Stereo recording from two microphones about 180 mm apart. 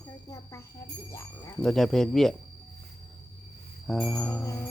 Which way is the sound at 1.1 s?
15° left (ahead or behind).